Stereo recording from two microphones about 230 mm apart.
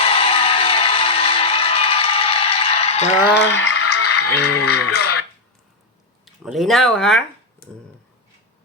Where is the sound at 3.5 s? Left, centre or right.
Left.